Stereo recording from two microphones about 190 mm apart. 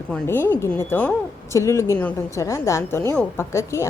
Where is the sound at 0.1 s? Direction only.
10° left (ahead or behind).